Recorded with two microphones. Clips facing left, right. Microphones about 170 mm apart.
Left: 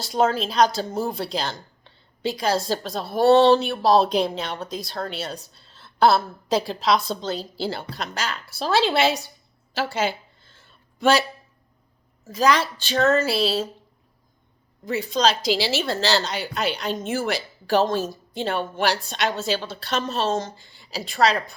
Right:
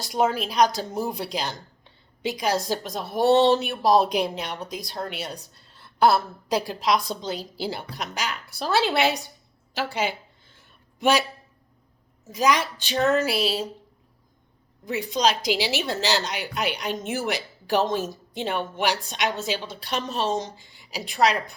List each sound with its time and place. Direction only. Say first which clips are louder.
0.0 s a woman's voice: left 2 dB; 15° right (ahead or behind)
9.7 s a sound: left 2 dB; 15° right (ahead or behind)
12.2 s a woman's voice: left 2 dB; 15° right (ahead or behind)
14.8 s a woman's voice: left 2 dB; 15° right (ahead or behind)